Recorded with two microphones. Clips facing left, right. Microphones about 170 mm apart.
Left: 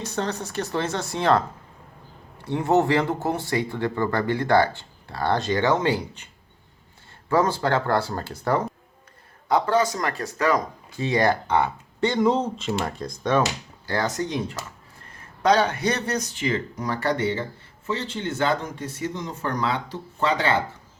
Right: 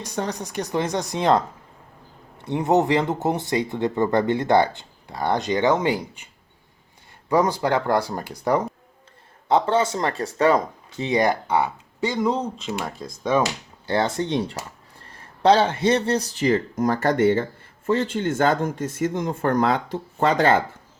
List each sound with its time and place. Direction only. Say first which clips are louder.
0.0 s speech: even; 15° right (ahead or behind)
7.3 s speech: right 1 dB; 15° right (ahead or behind)
9.5 s speech: right 1 dB; 25° right (ahead or behind); by 13.4 s 5° right (ahead or behind)
13.8 s speech: right 3 dB; 25° right (ahead or behind); by 20.6 s 45° right (ahead or behind)